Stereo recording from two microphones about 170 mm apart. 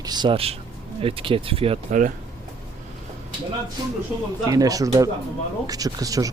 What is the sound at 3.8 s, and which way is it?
Speech, 20° right (ahead or behind).